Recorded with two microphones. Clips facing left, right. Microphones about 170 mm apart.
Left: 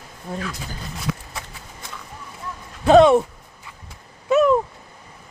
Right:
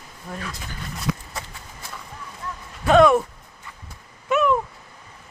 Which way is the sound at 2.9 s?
30° left (ahead or behind).